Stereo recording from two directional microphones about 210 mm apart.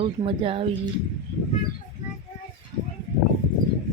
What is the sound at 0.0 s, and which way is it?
Speech, 25° right (ahead or behind).